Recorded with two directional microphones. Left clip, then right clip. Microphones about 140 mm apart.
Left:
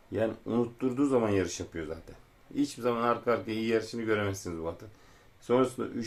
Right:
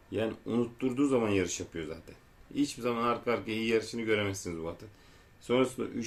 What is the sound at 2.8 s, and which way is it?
Speech, 10° right (ahead or behind).